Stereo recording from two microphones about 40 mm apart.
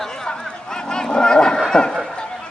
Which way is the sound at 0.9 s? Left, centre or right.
Centre.